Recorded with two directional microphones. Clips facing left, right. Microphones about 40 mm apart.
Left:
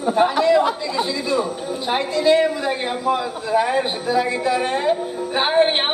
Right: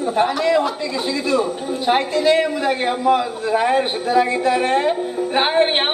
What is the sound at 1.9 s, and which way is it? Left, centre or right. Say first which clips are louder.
Speech: right 5 dB; centre.